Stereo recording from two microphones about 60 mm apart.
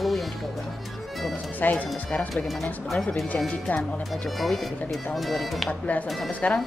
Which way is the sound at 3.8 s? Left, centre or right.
Centre.